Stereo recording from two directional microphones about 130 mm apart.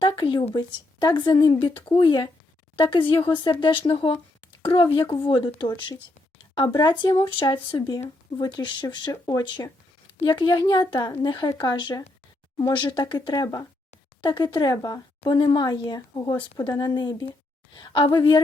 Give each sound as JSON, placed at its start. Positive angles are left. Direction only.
{"t": 0.0, "sound": "speech", "side_deg": 40}
{"t": 6.7, "sound": "speech", "side_deg": 35}